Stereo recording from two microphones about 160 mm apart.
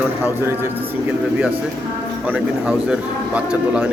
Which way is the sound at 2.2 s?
10° right (ahead or behind).